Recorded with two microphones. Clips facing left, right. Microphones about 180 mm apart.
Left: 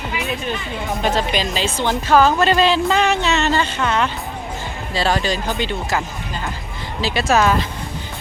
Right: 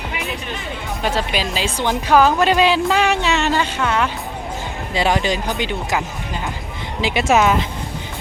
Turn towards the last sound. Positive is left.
turn(degrees=-20)  # may be behind; listen again after turning